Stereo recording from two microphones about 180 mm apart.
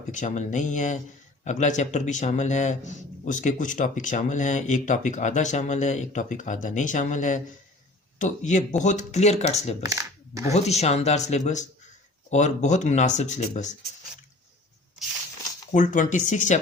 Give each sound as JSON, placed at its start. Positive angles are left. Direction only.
{"t": 0.1, "sound": "a man's voice", "side_deg": 40}
{"t": 9.8, "sound": "a sound", "side_deg": -20}
{"t": 10.5, "sound": "speech", "side_deg": 35}
{"t": 15.7, "sound": "a man's voice", "side_deg": 45}